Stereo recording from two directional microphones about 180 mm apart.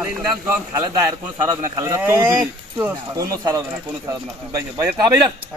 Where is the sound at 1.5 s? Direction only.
20° right (ahead or behind).